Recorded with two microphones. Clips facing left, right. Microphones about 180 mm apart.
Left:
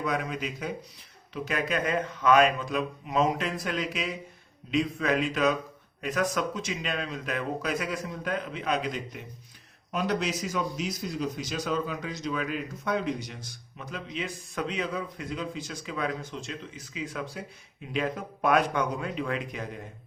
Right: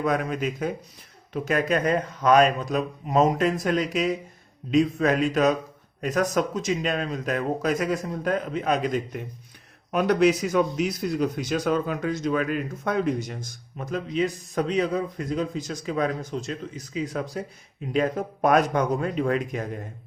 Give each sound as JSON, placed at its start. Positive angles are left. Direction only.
{"t": 0.0, "sound": "speech", "side_deg": -45}
{"t": 9.9, "sound": "a man's voice", "side_deg": -60}